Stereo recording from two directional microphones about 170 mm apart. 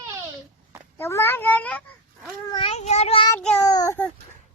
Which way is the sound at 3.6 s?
20° left (ahead or behind).